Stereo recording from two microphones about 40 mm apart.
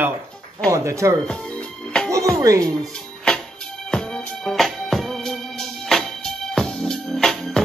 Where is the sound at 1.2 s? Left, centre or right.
Left.